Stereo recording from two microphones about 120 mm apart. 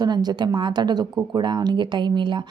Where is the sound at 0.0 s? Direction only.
35° right (ahead or behind).